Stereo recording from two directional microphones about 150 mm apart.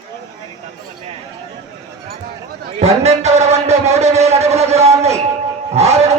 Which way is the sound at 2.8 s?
45° right (ahead or behind).